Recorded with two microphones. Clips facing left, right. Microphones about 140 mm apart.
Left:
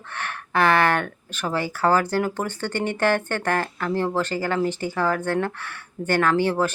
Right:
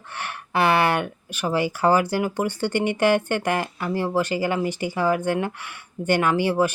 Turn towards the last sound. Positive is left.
turn(degrees=-10)  # may be behind; listen again after turning